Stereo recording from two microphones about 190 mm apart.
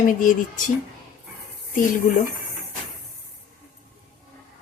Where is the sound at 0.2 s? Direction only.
45° left (ahead or behind).